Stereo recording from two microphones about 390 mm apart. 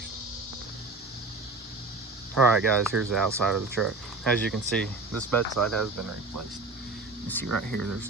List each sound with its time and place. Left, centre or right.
2.3 s speech: centre
7.5 s speech: centre